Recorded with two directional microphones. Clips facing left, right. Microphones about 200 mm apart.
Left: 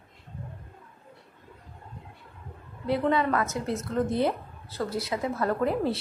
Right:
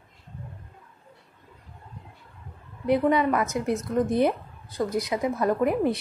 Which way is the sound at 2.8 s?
20° right (ahead or behind).